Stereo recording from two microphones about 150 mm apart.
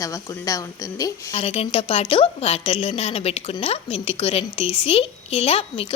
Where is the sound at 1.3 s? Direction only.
40° left (ahead or behind).